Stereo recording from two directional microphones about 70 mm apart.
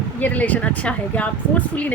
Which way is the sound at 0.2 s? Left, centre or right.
Left.